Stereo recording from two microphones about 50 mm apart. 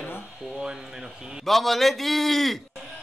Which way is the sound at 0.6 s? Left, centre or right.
Centre.